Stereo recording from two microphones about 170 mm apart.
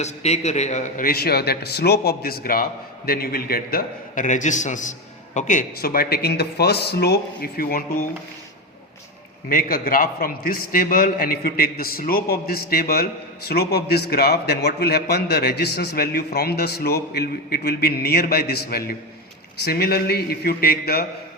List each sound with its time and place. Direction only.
0.0 s a man's voice: 40° left (ahead or behind); by 7.9 s 60° left (ahead or behind)
9.5 s a man's voice: 60° left (ahead or behind)